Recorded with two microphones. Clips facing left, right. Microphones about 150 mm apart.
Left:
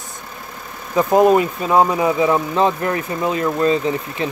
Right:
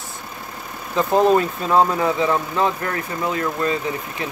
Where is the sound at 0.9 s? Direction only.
10° left (ahead or behind).